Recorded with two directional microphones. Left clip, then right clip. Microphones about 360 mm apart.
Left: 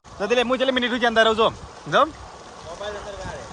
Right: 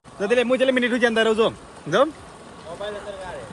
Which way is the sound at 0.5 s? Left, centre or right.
Left.